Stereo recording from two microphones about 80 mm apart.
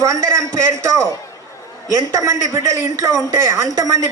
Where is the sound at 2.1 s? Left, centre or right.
Right.